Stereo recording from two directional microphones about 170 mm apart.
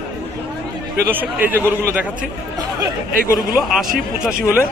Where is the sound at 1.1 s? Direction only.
10° right (ahead or behind).